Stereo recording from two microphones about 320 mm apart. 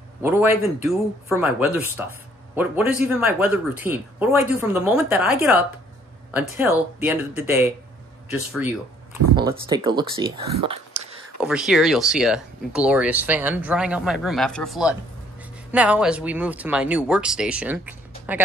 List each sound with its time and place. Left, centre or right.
0.2 s speech: centre
9.3 s speech: centre
10.4 s a sound: centre
11.3 s speech: centre